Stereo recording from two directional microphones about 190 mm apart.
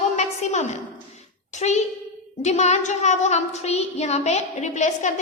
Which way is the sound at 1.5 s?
35° left (ahead or behind).